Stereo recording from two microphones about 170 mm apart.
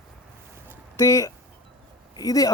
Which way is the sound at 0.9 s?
20° left (ahead or behind).